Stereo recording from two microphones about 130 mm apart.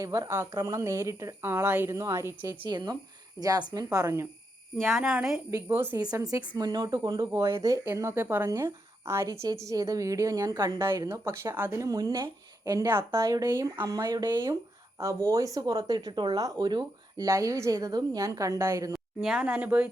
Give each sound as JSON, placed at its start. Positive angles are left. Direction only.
{"t": 0.0, "sound": "speech", "side_deg": -30}
{"t": 3.4, "sound": "a woman's voice", "side_deg": 30}
{"t": 3.9, "sound": "speech", "side_deg": -25}
{"t": 4.9, "sound": "a woman's voice", "side_deg": -5}
{"t": 5.5, "sound": "speech", "side_deg": -20}
{"t": 6.0, "sound": "speech", "side_deg": -30}
{"t": 11.8, "sound": "speech", "side_deg": -25}
{"t": 12.6, "sound": "speech", "side_deg": -20}
{"t": 18.9, "sound": "speech", "side_deg": 0}